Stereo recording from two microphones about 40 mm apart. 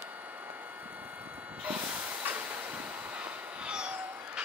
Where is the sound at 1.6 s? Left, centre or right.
Right.